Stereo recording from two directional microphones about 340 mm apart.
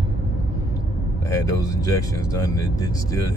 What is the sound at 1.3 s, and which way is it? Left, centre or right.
Speech, centre.